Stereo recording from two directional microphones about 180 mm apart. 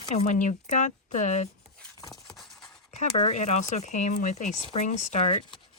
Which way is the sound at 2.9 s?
40° left (ahead or behind).